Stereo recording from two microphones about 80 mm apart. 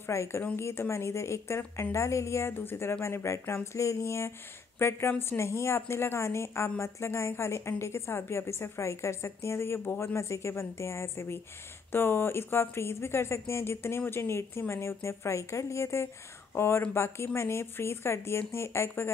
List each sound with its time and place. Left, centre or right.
0.0 s a woman's voice: left